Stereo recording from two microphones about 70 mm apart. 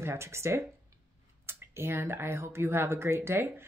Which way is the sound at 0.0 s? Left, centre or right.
Right.